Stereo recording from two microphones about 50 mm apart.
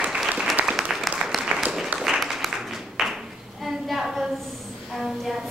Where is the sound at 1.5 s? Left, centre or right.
Right.